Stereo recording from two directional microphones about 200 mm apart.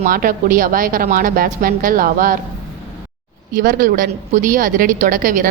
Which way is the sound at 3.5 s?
45° right (ahead or behind).